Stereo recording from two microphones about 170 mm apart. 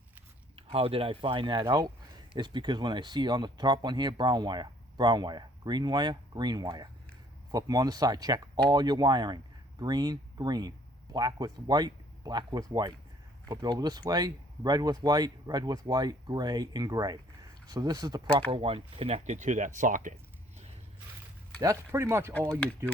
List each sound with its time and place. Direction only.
0.5 s speech: 35° right (ahead or behind)
18.5 s speech: 35° right (ahead or behind); by 20.1 s 50° right (ahead or behind)
21.6 s speech: 20° right (ahead or behind)